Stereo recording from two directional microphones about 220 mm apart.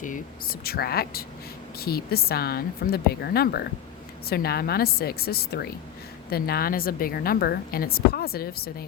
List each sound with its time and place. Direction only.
0.6 s a woman's voice: 45° left (ahead or behind)